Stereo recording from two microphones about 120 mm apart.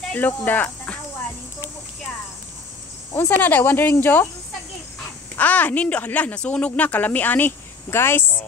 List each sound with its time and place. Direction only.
0.1 s speech: 15° left (ahead or behind)
3.2 s speech: 15° left (ahead or behind)
5.3 s speech: 15° left (ahead or behind)